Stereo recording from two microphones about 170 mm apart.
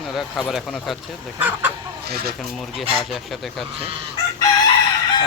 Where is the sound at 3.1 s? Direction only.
Centre (ahead or behind).